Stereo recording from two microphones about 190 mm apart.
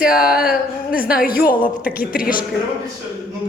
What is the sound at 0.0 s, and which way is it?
Speech, 55° left (ahead or behind).